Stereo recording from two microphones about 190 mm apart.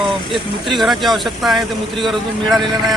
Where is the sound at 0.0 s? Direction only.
Centre (ahead or behind).